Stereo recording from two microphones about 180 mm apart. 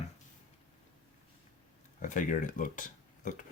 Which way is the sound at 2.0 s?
45° left (ahead or behind).